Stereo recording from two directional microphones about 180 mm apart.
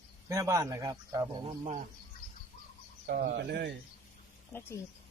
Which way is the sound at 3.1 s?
60° right (ahead or behind).